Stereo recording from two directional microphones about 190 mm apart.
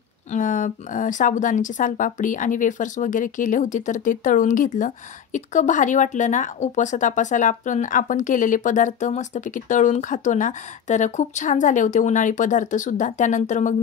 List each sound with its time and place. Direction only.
0.3 s a woman's voice: 40° left (ahead or behind)